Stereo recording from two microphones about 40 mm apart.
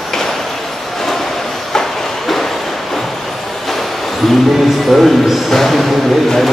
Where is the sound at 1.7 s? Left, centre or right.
Centre.